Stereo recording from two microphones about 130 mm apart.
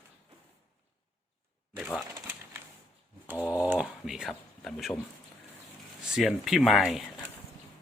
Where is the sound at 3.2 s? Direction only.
10° right (ahead or behind).